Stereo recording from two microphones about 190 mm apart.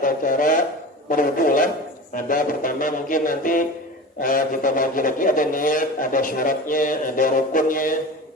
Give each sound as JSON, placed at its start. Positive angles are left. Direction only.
{"t": 0.0, "sound": "a man's voice", "side_deg": 45}